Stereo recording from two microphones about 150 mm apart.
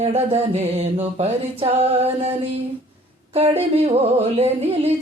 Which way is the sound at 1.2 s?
45° right (ahead or behind).